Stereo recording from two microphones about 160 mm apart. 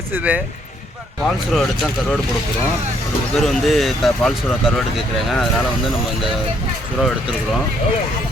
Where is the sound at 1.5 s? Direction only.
Centre (ahead or behind).